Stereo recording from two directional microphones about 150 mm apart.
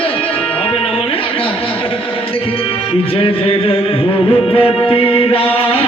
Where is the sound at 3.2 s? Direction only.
40° left (ahead or behind).